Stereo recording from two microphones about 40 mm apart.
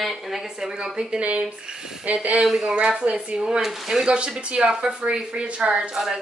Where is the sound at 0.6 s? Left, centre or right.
Centre.